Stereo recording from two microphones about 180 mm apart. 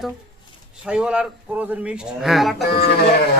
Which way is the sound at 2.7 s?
65° left (ahead or behind).